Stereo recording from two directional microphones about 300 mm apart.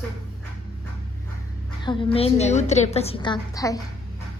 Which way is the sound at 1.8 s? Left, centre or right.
Centre.